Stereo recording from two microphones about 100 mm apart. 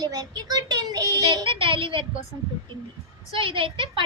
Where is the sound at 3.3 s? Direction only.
60° right (ahead or behind).